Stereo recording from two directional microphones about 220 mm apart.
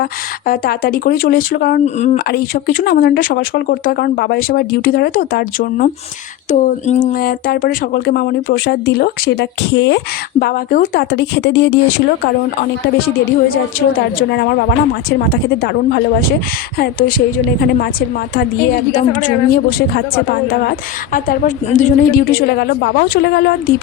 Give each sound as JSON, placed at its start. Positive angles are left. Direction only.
{"t": 0.0, "sound": "a woman's voice", "side_deg": 40}
{"t": 10.4, "sound": "a woman's voice", "side_deg": 40}
{"t": 13.5, "sound": "a woman's voice", "side_deg": 40}